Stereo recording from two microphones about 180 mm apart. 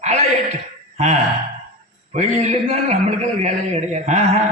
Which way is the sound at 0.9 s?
40° right (ahead or behind).